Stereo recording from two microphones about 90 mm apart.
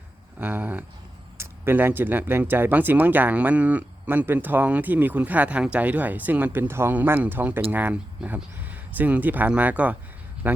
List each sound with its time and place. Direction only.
0.3 s speech: 20° right (ahead or behind)